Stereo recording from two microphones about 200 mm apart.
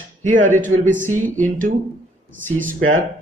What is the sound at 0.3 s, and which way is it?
Speech, 40° right (ahead or behind).